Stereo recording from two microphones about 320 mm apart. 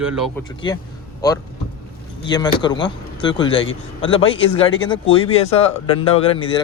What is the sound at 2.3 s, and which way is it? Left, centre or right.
Speech, centre.